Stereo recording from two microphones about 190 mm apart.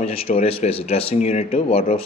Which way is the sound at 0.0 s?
30° left (ahead or behind).